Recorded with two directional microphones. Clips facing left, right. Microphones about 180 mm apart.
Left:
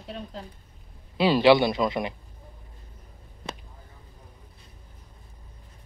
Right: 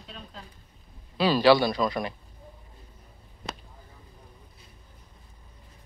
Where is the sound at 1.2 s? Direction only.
25° left (ahead or behind).